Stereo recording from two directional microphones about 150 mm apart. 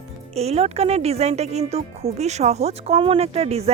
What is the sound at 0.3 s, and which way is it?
Speech, 45° right (ahead or behind).